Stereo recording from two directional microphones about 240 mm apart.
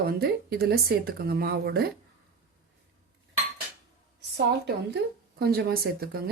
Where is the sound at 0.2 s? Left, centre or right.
Right.